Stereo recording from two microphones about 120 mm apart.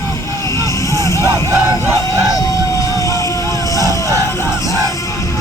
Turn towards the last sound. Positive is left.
turn(degrees=-30)  # may be behind; listen again after turning